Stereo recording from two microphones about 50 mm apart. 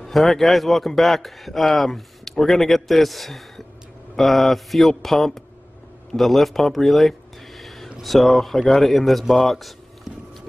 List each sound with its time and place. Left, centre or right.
0.0 s a man's voice: centre